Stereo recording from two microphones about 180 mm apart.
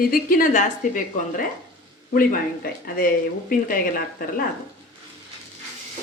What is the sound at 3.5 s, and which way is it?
Speech, 50° left (ahead or behind).